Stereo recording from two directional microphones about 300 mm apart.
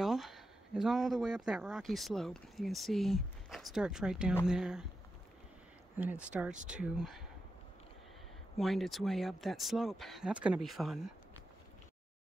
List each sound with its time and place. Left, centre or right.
0.0 s speech: centre
5.9 s speech: centre
6.5 s speech: right
6.8 s speech: centre
8.5 s speech: centre